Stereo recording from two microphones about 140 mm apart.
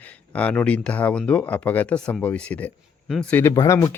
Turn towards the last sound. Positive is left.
turn(degrees=20)  # may be behind; listen again after turning